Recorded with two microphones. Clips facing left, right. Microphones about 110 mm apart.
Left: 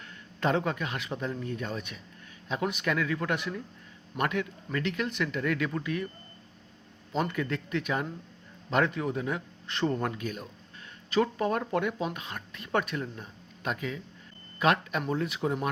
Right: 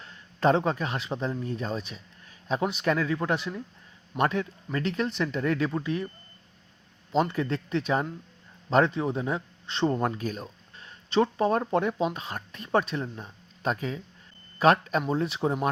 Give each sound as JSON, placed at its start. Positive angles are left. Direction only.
{"t": 0.0, "sound": "speech", "side_deg": -30}
{"t": 7.1, "sound": "speech", "side_deg": -30}